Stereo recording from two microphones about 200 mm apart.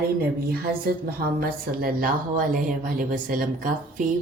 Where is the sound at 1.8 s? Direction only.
45° right (ahead or behind).